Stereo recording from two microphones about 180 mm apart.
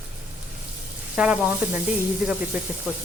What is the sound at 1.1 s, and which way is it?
Speech, 5° right (ahead or behind).